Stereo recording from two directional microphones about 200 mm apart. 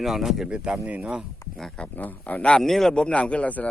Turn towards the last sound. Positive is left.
turn(degrees=5)  # may be behind; listen again after turning